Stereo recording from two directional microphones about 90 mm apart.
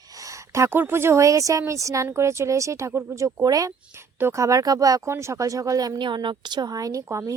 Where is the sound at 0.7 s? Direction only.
25° right (ahead or behind); by 5.9 s 40° right (ahead or behind).